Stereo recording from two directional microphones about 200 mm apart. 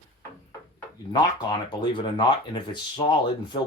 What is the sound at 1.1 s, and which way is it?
Speech, 20° left (ahead or behind).